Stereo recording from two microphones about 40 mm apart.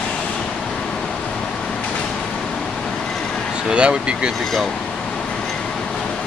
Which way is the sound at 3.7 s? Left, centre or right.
Right.